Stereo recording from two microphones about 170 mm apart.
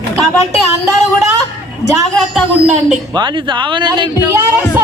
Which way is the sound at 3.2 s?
30° right (ahead or behind).